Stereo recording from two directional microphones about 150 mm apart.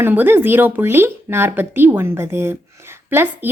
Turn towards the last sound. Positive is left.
turn(degrees=-15)  # may be behind; listen again after turning